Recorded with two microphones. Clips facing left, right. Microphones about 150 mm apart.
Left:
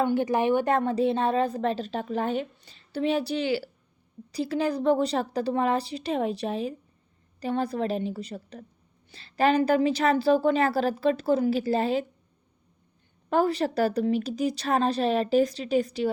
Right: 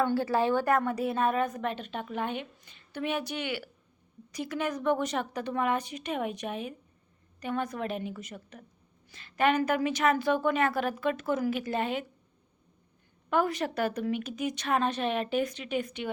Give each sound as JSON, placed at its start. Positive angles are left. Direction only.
{"t": 0.0, "sound": "a woman's voice", "side_deg": 20}
{"t": 13.3, "sound": "a woman's voice", "side_deg": 30}